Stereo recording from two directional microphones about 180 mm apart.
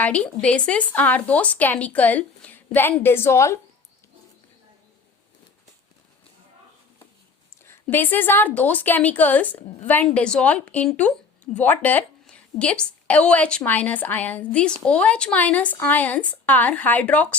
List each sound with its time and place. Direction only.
0.0 s speech: 5° left (ahead or behind)
7.6 s a woman's voice: 10° left (ahead or behind)